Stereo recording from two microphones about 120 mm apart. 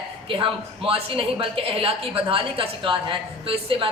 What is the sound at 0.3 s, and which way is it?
A woman's voice, 45° right (ahead or behind).